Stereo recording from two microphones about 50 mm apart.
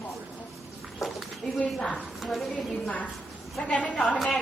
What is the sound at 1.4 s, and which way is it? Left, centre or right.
Speech, left.